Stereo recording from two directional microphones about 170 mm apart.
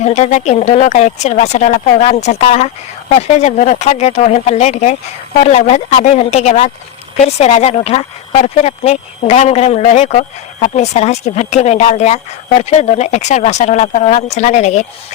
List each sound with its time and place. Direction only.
0.0 s speech: 40° left (ahead or behind)